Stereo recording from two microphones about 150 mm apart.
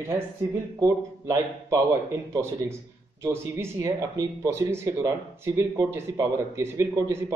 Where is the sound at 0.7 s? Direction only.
20° right (ahead or behind).